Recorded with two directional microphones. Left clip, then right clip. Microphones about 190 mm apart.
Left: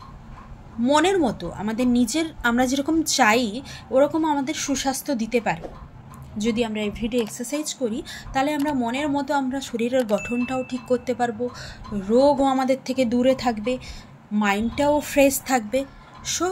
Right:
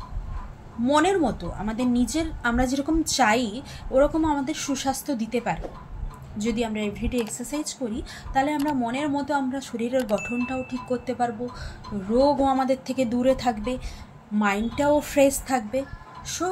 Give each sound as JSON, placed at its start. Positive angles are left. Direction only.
{"t": 0.8, "sound": "a woman's voice", "side_deg": 30}
{"t": 9.9, "sound": "speech", "side_deg": 0}
{"t": 10.4, "sound": "a woman's voice", "side_deg": 30}